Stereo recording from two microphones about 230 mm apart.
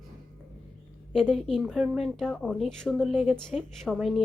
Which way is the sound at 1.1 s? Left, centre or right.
Centre.